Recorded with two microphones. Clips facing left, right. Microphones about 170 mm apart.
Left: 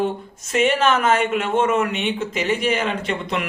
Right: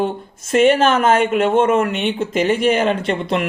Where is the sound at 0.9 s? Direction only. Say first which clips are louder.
Right 3 dB; 50° right (ahead or behind).